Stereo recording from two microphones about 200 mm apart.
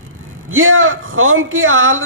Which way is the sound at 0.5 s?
80° right.